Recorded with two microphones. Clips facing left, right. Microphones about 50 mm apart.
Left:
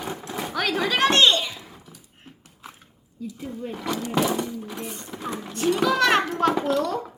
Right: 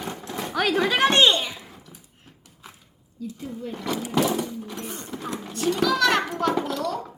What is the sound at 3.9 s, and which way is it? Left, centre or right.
Speech, centre.